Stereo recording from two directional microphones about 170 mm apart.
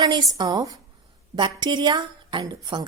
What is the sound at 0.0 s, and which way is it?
A woman's voice, 25° right (ahead or behind).